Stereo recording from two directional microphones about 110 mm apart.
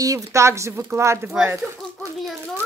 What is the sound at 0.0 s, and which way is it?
Speech, 30° right (ahead or behind).